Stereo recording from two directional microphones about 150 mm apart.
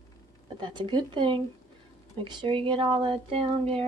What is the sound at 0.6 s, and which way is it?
Speech, 30° right (ahead or behind).